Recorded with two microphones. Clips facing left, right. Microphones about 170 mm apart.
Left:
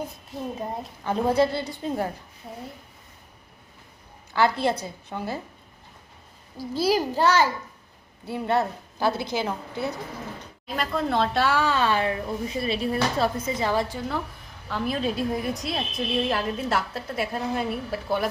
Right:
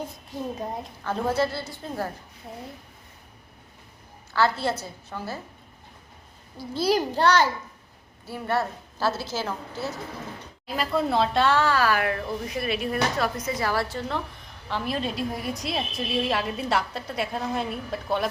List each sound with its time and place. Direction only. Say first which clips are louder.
0.3 s a woman's voice: right 1 dB; centre (ahead or behind)
1.0 s a woman's voice: left 3 dB; 15° left (ahead or behind)
4.4 s a woman's voice: left 2 dB; 15° left (ahead or behind)
6.8 s a woman's voice: even; 5° left (ahead or behind)
8.3 s a woman's voice: left 3 dB; 20° left (ahead or behind)
10.7 s speech: right 1 dB; centre (ahead or behind); by 14.0 s 15° left (ahead or behind)
14.7 s a woman's voice: left 2 dB; centre (ahead or behind)